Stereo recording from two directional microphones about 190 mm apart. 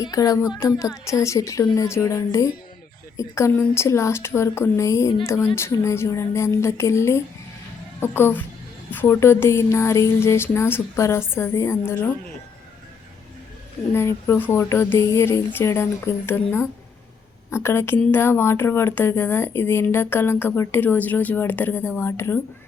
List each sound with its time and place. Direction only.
0.0 s a woman's voice: 20° left (ahead or behind)
13.9 s a woman's voice: 15° left (ahead or behind)
17.5 s a woman's voice: 15° left (ahead or behind)